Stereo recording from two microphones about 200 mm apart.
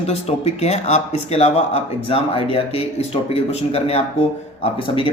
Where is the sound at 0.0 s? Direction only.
30° left (ahead or behind).